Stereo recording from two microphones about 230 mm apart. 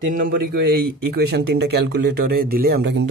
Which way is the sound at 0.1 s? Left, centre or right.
Right.